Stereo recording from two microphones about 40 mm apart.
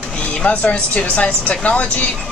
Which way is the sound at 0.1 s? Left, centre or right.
Left.